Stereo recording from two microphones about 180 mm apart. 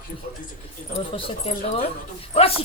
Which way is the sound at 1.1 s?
35° left (ahead or behind).